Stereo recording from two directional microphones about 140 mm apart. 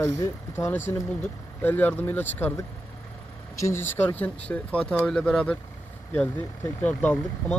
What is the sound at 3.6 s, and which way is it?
Speech, 15° left (ahead or behind).